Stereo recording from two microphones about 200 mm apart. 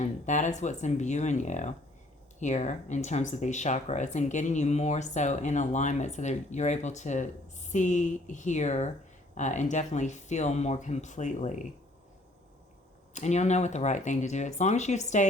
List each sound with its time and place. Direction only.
0.0 s speech: 35° left (ahead or behind)
13.1 s speech: 35° left (ahead or behind)